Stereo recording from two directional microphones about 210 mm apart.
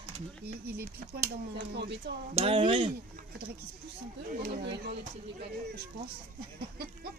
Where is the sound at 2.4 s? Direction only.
25° right (ahead or behind).